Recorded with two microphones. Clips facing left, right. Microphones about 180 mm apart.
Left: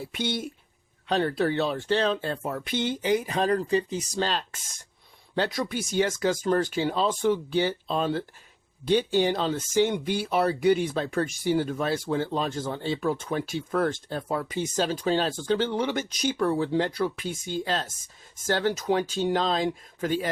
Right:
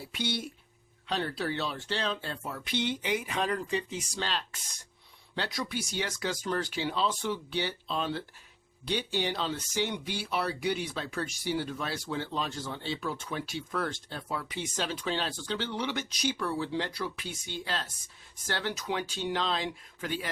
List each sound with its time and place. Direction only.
0.1 s speech: 50° left (ahead or behind)